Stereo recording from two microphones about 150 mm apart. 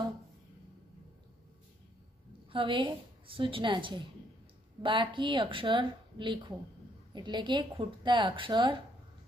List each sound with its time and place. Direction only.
2.5 s speech: 35° right (ahead or behind)